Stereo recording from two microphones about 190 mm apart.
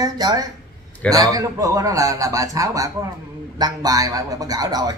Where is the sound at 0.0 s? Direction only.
20° right (ahead or behind).